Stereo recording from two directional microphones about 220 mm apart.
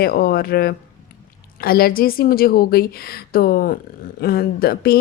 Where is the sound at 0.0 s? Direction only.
40° left (ahead or behind).